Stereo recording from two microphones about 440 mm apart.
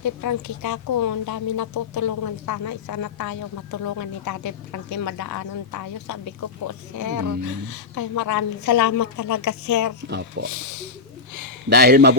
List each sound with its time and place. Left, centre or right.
0.0 s a woman's voice: left
10.1 s speech: right
10.5 s a woman's voice: left
11.7 s speech: right